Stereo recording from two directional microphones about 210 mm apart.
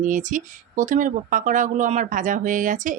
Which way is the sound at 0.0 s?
35° right (ahead or behind).